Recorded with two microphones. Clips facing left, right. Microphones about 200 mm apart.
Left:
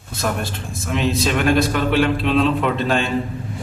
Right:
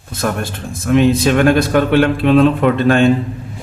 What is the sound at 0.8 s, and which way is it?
A man's voice, 55° right (ahead or behind).